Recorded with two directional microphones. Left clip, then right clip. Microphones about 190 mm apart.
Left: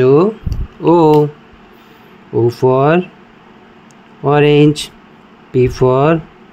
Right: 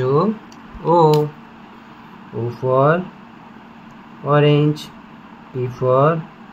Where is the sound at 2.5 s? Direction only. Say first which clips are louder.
Left 3 dB; 50° left (ahead or behind).